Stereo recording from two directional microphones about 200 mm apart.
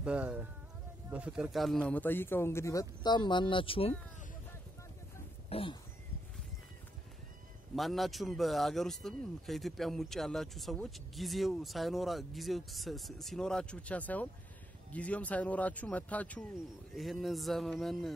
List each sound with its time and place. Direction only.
0.0 s a man's voice: 5° right (ahead or behind); by 3.9 s 25° left (ahead or behind)
5.5 s a sound: 25° left (ahead or behind)
7.7 s a man's voice: centre (ahead or behind)